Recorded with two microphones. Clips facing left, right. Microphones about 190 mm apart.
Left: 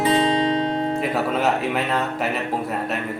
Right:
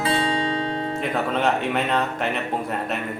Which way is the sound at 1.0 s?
5° left (ahead or behind).